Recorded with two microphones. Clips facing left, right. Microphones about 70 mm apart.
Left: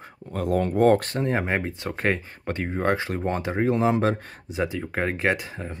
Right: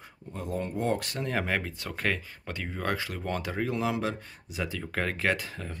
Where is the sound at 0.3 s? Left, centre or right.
Left.